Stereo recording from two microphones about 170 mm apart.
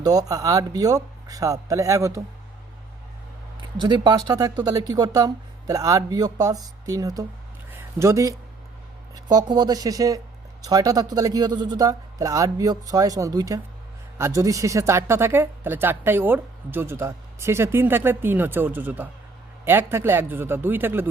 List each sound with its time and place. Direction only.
0.0 s speech: 20° right (ahead or behind)
3.8 s speech: 25° right (ahead or behind)
7.7 s a sound: 15° right (ahead or behind)
9.1 s a woman's voice: 25° right (ahead or behind)